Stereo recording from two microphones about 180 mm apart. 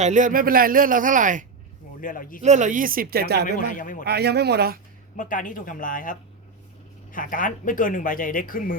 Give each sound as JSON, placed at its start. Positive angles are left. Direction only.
{"t": 0.0, "sound": "a man's voice", "side_deg": -45}
{"t": 2.0, "sound": "speech", "side_deg": 50}
{"t": 2.4, "sound": "a man's voice", "side_deg": -40}
{"t": 3.7, "sound": "speech", "side_deg": 50}
{"t": 4.0, "sound": "speech", "side_deg": -65}
{"t": 5.1, "sound": "speech", "side_deg": 50}